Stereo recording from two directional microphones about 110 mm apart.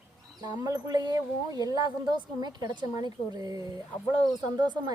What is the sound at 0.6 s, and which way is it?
A woman's voice, 35° right (ahead or behind).